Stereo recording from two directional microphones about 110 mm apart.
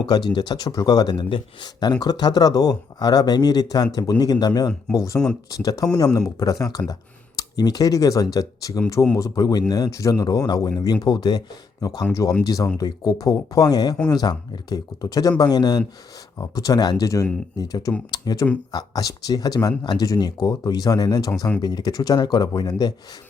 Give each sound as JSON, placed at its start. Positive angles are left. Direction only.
{"t": 0.0, "sound": "speech", "side_deg": 40}